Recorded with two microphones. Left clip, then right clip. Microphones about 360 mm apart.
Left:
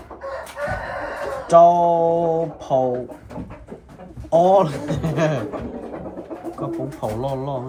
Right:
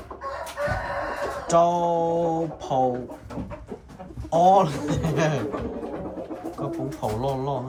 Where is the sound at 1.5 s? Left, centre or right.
Centre.